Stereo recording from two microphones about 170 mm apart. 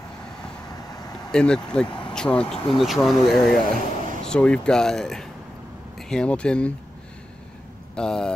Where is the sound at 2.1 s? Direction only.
5° left (ahead or behind).